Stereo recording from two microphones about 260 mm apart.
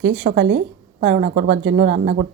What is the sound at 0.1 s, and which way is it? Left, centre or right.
Speech, right.